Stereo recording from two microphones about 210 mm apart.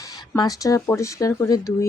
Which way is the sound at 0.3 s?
15° left (ahead or behind).